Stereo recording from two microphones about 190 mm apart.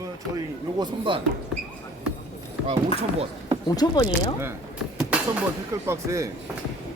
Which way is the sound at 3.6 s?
20° left (ahead or behind).